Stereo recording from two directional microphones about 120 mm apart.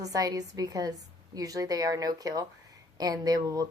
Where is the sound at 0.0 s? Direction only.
30° right (ahead or behind).